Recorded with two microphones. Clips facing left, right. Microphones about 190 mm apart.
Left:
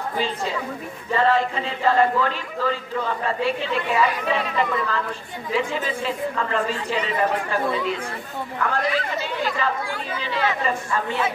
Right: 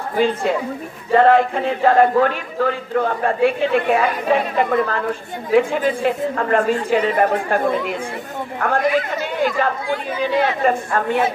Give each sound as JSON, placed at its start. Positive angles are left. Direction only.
{"t": 0.2, "sound": "a man's voice", "side_deg": -55}